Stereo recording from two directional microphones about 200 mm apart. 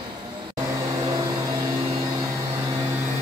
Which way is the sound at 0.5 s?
15° right (ahead or behind).